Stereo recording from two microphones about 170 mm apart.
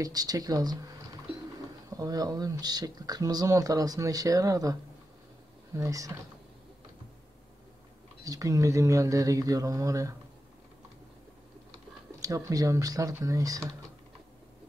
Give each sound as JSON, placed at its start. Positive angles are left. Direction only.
{"t": 0.0, "sound": "speech", "side_deg": -20}
{"t": 1.9, "sound": "speech", "side_deg": -20}
{"t": 5.8, "sound": "speech", "side_deg": -20}
{"t": 8.2, "sound": "speech", "side_deg": -20}
{"t": 12.2, "sound": "speech", "side_deg": -20}